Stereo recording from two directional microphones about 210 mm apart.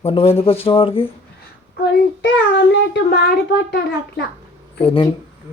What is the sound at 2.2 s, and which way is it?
A child's voice, 55° left (ahead or behind).